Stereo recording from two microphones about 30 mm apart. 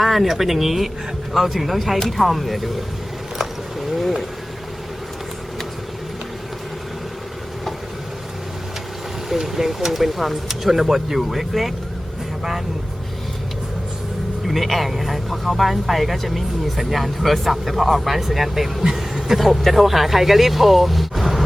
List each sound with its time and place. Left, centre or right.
0.0 s speech: centre
3.3 s a sound: centre
9.3 s speech: centre
14.4 s speech: centre